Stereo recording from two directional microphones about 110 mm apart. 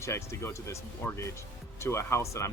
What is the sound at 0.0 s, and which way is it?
Speech, 25° left (ahead or behind).